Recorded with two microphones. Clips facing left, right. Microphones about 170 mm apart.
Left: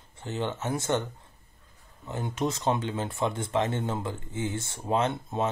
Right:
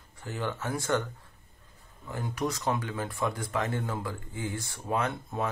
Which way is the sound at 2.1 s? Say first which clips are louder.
Left 2 dB; 25° left (ahead or behind).